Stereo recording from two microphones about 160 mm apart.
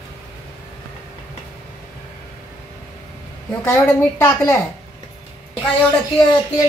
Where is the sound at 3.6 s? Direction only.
15° left (ahead or behind).